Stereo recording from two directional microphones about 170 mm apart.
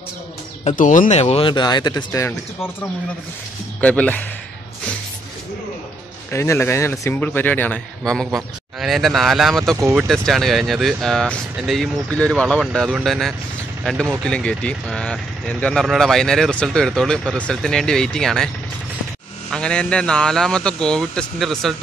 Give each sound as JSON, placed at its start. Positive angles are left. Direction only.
{"t": 0.7, "sound": "speech", "side_deg": 50}
{"t": 3.8, "sound": "speech", "side_deg": 10}
{"t": 6.3, "sound": "speech", "side_deg": 15}
{"t": 9.8, "sound": "speech", "side_deg": -15}
{"t": 10.0, "sound": "speech", "side_deg": 0}
{"t": 19.5, "sound": "speech", "side_deg": 5}